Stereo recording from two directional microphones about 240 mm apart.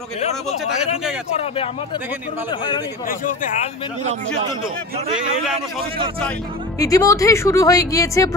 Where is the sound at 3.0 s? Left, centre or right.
Left.